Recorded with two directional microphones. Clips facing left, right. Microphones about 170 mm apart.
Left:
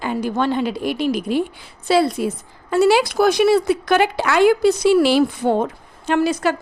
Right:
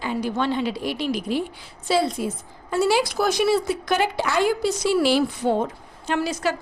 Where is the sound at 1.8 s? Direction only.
70° left (ahead or behind).